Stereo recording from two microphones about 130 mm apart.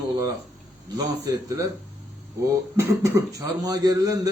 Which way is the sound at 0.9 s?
25° right (ahead or behind).